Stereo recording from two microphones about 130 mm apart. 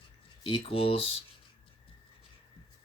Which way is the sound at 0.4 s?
45° left (ahead or behind).